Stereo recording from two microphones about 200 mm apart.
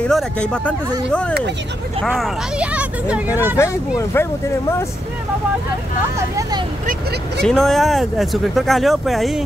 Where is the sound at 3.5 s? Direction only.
15° left (ahead or behind).